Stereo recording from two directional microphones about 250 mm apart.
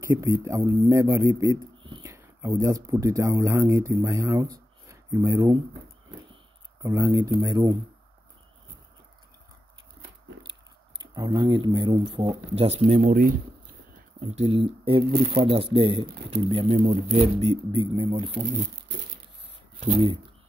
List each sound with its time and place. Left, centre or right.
0.1 s speech: centre
6.8 s speech: centre
11.0 s speech: centre
19.8 s speech: right